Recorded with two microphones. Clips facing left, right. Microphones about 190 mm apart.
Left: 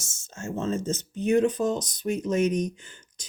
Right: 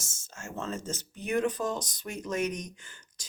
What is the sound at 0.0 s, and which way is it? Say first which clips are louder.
Speech: left 8 dB; 25° left (ahead or behind).